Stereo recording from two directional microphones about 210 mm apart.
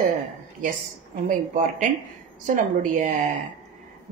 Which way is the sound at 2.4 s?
40° right (ahead or behind).